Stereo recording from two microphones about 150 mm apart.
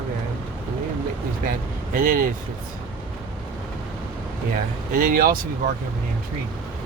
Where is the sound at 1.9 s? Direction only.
65° right (ahead or behind).